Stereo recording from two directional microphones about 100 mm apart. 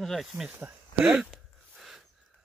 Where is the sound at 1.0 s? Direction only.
5° right (ahead or behind).